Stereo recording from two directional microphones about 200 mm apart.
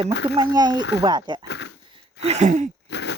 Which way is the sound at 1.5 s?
60° left (ahead or behind).